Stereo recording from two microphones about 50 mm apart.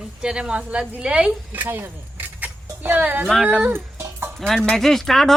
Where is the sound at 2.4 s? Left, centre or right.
Right.